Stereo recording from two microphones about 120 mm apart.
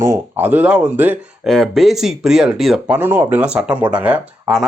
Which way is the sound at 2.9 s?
15° right (ahead or behind).